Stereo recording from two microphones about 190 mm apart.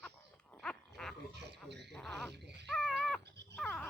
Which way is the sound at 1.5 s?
65° right (ahead or behind).